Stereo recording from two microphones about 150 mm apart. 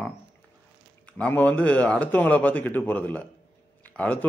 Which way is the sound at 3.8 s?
10° left (ahead or behind).